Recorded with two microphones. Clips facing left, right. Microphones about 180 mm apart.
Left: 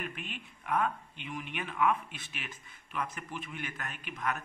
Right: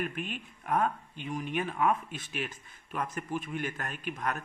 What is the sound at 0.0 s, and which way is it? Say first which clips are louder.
Speech: right 6 dB; 45° right (ahead or behind).